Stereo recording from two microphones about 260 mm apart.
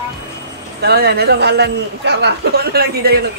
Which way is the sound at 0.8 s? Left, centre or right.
Right.